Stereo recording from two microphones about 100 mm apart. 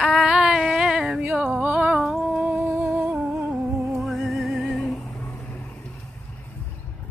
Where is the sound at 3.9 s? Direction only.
Centre (ahead or behind).